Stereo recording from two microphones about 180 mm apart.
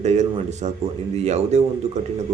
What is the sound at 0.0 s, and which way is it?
A man's voice, 40° right (ahead or behind).